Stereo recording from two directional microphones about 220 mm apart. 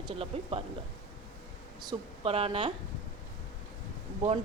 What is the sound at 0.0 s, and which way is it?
Speech, 25° right (ahead or behind).